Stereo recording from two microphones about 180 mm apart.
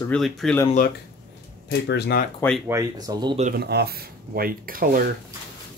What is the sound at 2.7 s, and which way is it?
Speech, 20° right (ahead or behind).